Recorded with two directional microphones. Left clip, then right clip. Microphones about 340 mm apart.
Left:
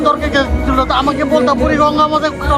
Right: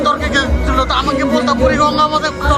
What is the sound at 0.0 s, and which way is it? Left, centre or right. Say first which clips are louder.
A man's voice: left 1 dB; centre.